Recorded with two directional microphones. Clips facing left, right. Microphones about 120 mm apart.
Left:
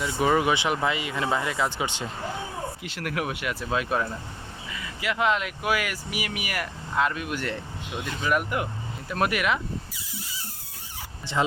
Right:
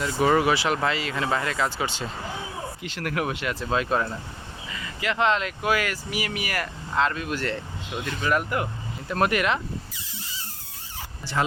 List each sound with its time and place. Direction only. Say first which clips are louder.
0.0 s speech: right 2 dB; 15° left (ahead or behind)
4.9 s speech: right 1 dB; 10° left (ahead or behind)
9.1 s squeal: right 2 dB; 10° left (ahead or behind)
11.3 s speech: even; 20° left (ahead or behind)